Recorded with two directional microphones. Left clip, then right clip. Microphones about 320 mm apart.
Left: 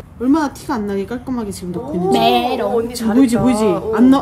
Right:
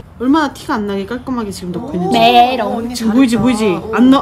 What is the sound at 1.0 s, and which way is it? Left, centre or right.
Speech, centre.